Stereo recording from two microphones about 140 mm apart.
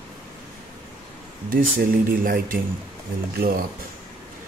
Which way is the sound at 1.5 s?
90° right.